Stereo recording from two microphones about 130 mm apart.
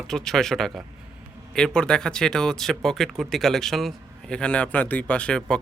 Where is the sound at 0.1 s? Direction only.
5° left (ahead or behind).